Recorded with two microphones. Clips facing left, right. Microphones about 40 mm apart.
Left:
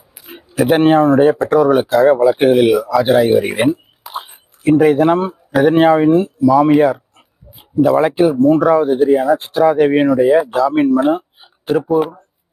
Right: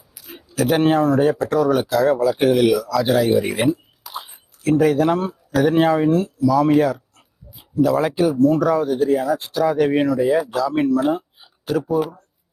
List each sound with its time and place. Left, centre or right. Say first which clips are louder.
0.3 s a sound: left 5 dB; centre
0.8 s speech: left 6 dB; left
4.6 s speech: left 5 dB; centre